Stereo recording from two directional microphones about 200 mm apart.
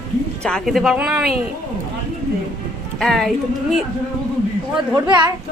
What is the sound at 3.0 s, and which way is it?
Speech, centre (ahead or behind).